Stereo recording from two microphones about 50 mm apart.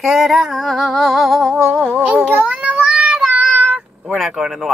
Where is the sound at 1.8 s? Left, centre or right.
Centre.